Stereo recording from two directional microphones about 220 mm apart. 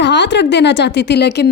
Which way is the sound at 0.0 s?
55° left (ahead or behind).